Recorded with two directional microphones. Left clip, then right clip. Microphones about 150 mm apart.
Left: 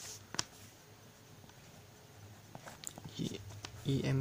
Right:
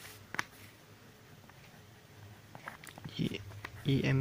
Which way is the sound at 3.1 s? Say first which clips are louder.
Right 5 dB; 20° right (ahead or behind).